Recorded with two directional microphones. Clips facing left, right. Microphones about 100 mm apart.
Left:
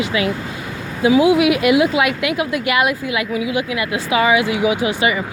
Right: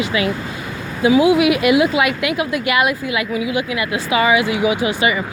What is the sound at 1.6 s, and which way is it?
A woman's voice, 85° left.